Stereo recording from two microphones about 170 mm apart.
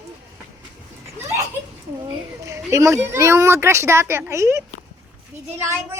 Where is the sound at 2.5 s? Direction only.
20° right (ahead or behind).